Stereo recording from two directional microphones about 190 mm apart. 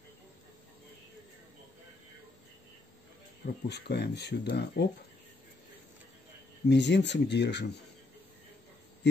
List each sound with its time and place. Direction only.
3.6 s speech: 60° left (ahead or behind)
6.7 s speech: 65° left (ahead or behind)
9.0 s insect: 65° left (ahead or behind)